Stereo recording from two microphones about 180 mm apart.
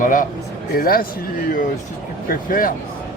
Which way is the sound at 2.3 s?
50° left (ahead or behind).